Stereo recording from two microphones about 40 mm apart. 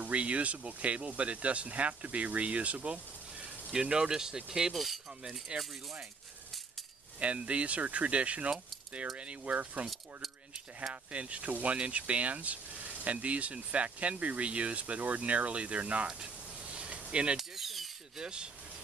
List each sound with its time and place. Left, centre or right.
0.0 s speech: right; by 4.7 s centre
4.7 s speech: centre
5.5 s speech: right
7.2 s speech: right
10.9 s speech: right
16.7 s a sound: right
17.4 s ratchet: centre
18.1 s speech: right